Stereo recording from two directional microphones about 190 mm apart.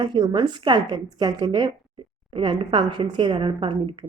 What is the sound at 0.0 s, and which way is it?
Speech, 25° right (ahead or behind).